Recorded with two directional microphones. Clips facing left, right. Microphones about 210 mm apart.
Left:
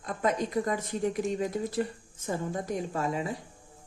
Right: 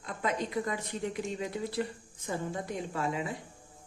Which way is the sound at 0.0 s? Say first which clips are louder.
Left 4 dB; 45° left (ahead or behind).